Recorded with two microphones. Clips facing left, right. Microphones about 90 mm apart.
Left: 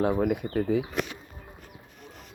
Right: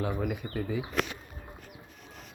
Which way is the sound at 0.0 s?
50° left (ahead or behind).